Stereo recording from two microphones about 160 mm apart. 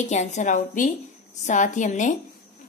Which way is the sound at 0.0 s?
45° left (ahead or behind).